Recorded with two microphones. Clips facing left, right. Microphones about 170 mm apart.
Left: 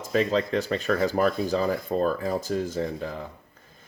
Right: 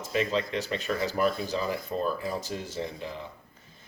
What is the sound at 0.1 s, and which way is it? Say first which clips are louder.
Speech: left 5 dB; 40° left (ahead or behind).